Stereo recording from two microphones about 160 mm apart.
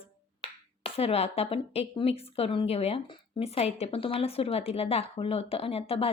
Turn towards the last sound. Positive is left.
turn(degrees=35)  # may be behind; listen again after turning